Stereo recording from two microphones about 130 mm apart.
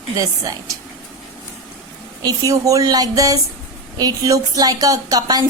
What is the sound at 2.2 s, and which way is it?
A woman's voice, 25° right (ahead or behind).